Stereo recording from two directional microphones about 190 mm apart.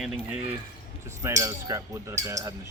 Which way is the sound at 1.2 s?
15° right (ahead or behind).